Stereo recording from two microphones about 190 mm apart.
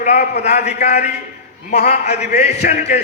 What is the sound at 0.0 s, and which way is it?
A man's voice, 35° left (ahead or behind).